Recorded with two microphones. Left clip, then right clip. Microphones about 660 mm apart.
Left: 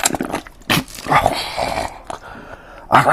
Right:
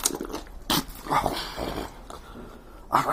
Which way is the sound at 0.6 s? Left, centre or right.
Left.